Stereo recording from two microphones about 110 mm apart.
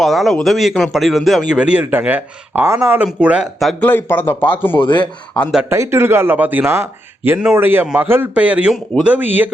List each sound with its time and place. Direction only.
0.0 s a man's voice: centre (ahead or behind)
3.6 s a man's voice: centre (ahead or behind)
3.8 s a man's voice: 20° left (ahead or behind)
4.8 s speech: 45° left (ahead or behind)
5.6 s a man's voice: 25° right (ahead or behind)